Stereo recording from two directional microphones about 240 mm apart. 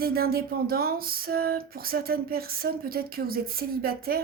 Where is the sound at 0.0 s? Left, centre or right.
Right.